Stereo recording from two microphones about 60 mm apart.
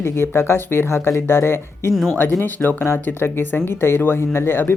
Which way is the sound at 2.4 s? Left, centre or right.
Left.